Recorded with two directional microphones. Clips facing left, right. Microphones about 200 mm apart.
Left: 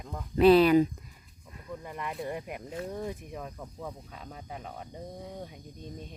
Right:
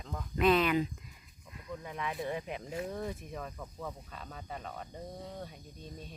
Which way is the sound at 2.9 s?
10° left (ahead or behind).